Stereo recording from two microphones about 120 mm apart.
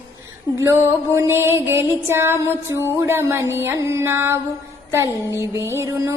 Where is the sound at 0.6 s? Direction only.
20° right (ahead or behind).